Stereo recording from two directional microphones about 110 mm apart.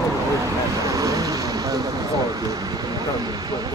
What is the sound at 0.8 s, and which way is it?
Vehicle, 30° right (ahead or behind).